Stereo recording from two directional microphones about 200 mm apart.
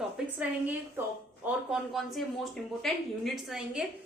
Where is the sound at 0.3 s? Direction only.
10° right (ahead or behind).